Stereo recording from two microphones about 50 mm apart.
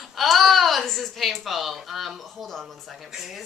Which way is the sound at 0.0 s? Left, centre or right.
Centre.